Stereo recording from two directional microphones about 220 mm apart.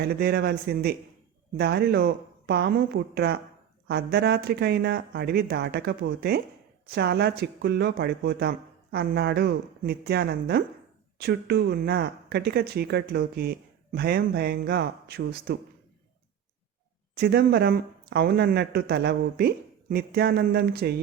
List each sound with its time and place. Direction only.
0.0 s speech: 45° right (ahead or behind)
17.2 s speech: 45° right (ahead or behind)